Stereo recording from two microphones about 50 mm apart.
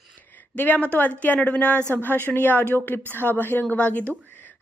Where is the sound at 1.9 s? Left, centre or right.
Left.